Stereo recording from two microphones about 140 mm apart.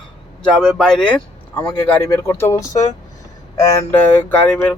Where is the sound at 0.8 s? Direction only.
5° left (ahead or behind).